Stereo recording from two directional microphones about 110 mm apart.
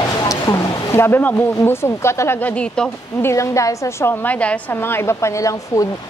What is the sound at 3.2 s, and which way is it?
A woman's voice, 25° left (ahead or behind).